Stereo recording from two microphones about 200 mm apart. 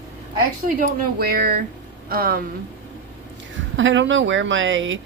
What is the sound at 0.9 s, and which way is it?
Speech, 50° right (ahead or behind).